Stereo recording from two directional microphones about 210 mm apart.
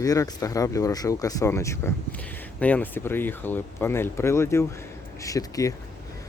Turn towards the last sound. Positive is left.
turn(degrees=15)  # may be behind; listen again after turning